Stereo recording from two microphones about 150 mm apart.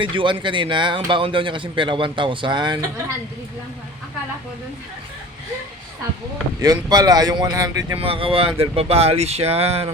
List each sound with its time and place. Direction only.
0.0 s speech: 35° right (ahead or behind)
6.6 s speech: 25° right (ahead or behind)
7.9 s speech: 40° right (ahead or behind)